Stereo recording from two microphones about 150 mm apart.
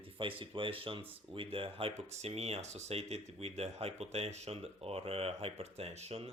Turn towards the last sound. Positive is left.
turn(degrees=-45)  # may be behind; listen again after turning